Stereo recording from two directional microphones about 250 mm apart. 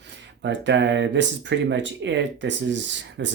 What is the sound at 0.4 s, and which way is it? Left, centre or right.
Speech, right.